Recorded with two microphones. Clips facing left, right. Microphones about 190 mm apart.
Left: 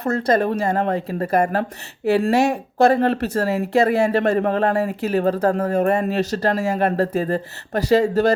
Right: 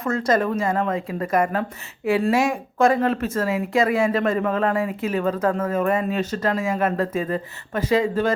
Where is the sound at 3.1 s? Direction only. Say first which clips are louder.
Left 2 dB; 70° left (ahead or behind).